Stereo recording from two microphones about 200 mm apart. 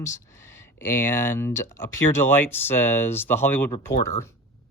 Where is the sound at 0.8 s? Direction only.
10° left (ahead or behind).